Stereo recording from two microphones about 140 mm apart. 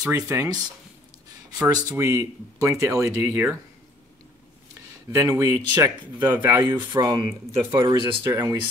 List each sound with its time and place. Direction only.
0.1 s speech: 25° right (ahead or behind)
1.6 s speech: 25° right (ahead or behind)
5.1 s speech: 20° right (ahead or behind)
6.9 s speech: 30° right (ahead or behind)